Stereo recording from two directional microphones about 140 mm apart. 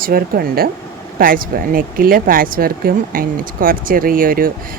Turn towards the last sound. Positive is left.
turn(degrees=-90)